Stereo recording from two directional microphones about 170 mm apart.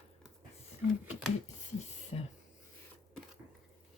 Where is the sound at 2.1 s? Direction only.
35° left (ahead or behind).